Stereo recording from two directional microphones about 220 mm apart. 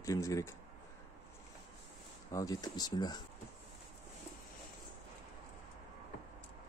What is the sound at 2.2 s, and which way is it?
Speech, 15° left (ahead or behind).